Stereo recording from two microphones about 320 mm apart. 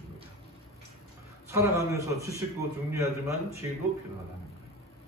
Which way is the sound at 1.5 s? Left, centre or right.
Centre.